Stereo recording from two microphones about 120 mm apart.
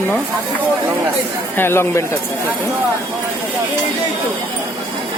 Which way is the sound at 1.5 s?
20° left (ahead or behind).